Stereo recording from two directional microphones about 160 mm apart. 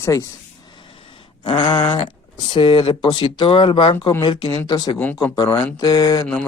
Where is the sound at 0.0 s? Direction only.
20° left (ahead or behind).